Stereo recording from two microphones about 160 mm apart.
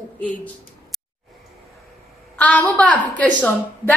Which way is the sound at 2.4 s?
10° left (ahead or behind).